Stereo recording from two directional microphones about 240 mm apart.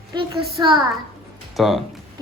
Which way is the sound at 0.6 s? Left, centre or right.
Centre.